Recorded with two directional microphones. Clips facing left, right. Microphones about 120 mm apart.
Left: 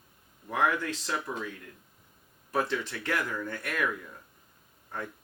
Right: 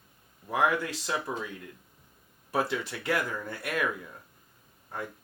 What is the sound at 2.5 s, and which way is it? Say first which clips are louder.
Speech: even; 10° right (ahead or behind).